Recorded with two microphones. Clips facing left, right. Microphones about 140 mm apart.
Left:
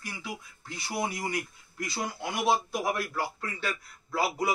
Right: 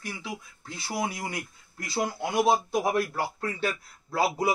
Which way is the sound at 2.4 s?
25° right (ahead or behind).